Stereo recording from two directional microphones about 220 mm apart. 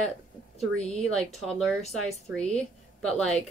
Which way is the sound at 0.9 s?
Centre (ahead or behind).